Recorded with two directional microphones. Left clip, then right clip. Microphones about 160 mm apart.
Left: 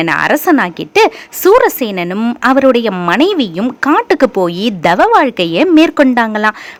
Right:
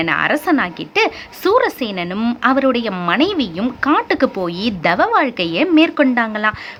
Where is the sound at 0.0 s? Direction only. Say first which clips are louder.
Left 5 dB; 40° left (ahead or behind).